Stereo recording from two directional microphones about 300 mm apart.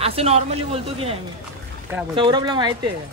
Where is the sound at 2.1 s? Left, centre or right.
Centre.